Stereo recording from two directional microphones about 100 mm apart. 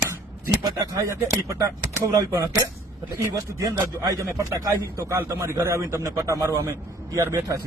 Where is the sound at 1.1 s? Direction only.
35° right (ahead or behind).